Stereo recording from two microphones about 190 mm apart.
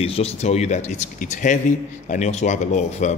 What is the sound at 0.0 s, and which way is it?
A man's voice, 30° left (ahead or behind).